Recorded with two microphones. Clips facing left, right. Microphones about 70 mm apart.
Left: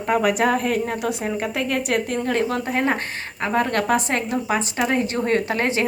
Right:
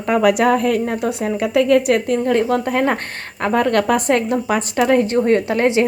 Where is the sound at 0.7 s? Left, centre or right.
Right.